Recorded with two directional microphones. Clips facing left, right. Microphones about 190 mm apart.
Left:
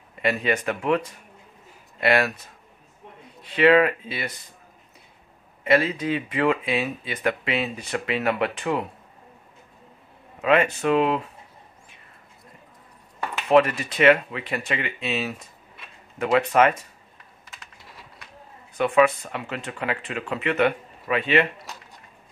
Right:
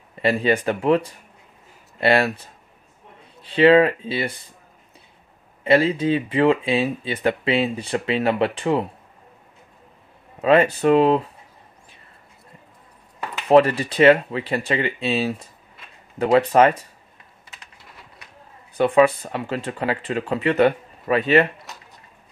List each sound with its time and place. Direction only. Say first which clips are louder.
0.2 s speech: right 4 dB; 30° right (ahead or behind)
5.6 s speech: right 4 dB; 30° right (ahead or behind)
10.4 s speech: right 4 dB; 35° right (ahead or behind)
13.5 s speech: right 4 dB; 30° right (ahead or behind)
18.8 s speech: right 3 dB; 35° right (ahead or behind)